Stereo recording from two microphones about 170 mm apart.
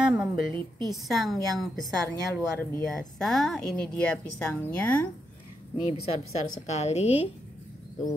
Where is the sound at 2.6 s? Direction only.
15° left (ahead or behind).